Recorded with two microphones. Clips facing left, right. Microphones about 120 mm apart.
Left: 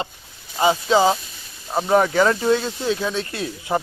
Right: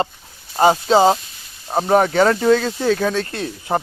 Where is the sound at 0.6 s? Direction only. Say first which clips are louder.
Right 4 dB; 40° right (ahead or behind).